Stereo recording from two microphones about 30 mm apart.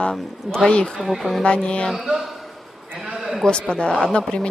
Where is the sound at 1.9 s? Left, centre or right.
Centre.